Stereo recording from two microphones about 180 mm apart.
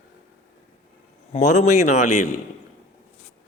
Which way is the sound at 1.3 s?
40° left (ahead or behind).